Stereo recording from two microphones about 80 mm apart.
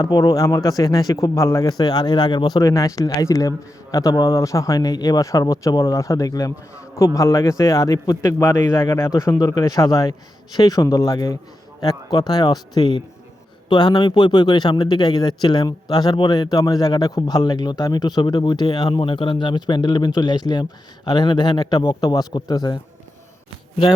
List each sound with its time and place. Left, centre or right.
0.0 s speech: left
1.8 s speech: left
8.2 s speech: left